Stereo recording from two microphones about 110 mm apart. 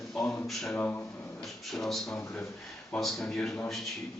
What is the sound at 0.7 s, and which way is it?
Speech, 15° left (ahead or behind).